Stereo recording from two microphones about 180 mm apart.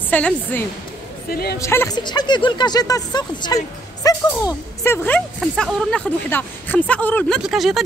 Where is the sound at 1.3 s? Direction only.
60° left (ahead or behind).